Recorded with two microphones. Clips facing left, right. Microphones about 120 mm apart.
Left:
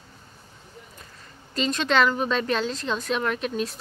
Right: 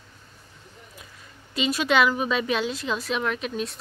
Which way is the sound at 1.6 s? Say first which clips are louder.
Even; 5° right (ahead or behind).